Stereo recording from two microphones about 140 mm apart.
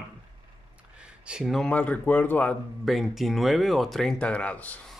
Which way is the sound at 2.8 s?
Centre (ahead or behind).